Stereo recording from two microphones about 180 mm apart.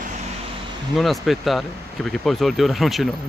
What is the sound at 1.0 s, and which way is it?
Speech, centre (ahead or behind).